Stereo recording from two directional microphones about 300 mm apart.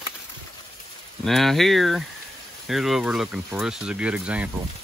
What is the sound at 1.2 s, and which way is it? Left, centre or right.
Speech, centre.